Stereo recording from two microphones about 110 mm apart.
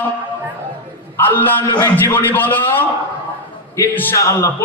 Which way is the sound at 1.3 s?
20° left (ahead or behind).